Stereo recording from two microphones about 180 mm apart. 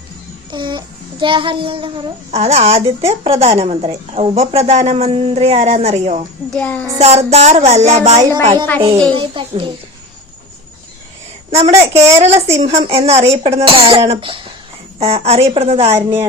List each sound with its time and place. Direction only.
0.5 s a child's voice: 25° right (ahead or behind)
6.5 s child singing: 5° left (ahead or behind)
7.0 s a child's voice: 35° right (ahead or behind)
11.7 s a woman's voice: 15° right (ahead or behind)
12.2 s a child's voice: 40° right (ahead or behind)